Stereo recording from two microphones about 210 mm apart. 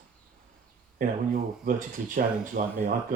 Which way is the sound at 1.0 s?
40° right (ahead or behind).